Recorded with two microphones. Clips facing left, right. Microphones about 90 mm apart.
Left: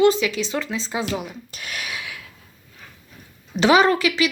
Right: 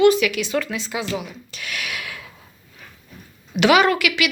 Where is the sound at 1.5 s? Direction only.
40° left (ahead or behind).